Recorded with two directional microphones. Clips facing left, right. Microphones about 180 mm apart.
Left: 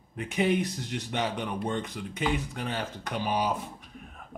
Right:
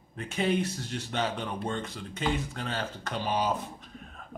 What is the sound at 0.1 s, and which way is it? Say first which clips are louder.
Speech: left 2 dB; 15° left (ahead or behind).